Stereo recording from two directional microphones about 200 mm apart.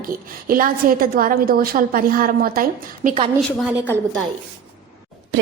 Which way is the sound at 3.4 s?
10° left (ahead or behind).